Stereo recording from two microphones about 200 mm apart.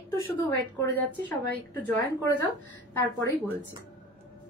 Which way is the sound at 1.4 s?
45° right (ahead or behind).